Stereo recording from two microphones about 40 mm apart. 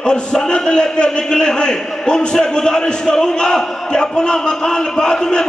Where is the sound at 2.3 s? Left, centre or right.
Centre.